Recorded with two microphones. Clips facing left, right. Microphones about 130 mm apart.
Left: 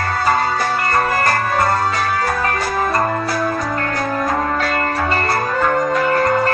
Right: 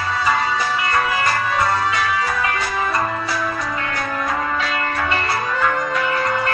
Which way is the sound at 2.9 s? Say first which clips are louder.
Left 4 dB; 45° left (ahead or behind).